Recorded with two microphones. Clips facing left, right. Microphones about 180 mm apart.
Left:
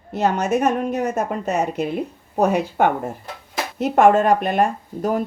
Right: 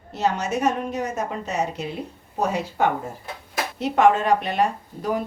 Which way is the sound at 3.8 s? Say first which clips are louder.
Left 4 dB; 50° left (ahead or behind).